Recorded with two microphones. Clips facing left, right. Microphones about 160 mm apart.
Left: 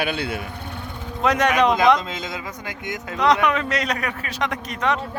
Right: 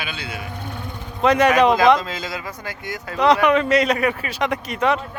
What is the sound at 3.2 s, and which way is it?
A man's voice, centre (ahead or behind).